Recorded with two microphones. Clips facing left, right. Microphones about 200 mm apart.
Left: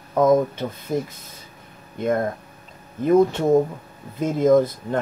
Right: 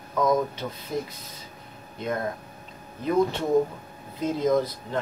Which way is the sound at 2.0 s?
50° left (ahead or behind).